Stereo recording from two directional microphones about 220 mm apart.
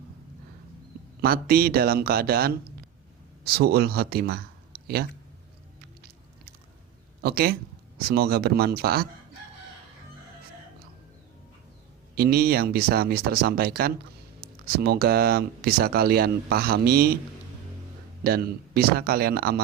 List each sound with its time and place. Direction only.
1.2 s speech: 45° right (ahead or behind)
7.2 s speech: 45° right (ahead or behind)
12.1 s speech: 45° right (ahead or behind)
18.2 s speech: 45° right (ahead or behind)